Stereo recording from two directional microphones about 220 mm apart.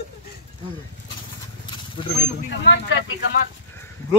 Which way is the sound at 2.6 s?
55° left (ahead or behind).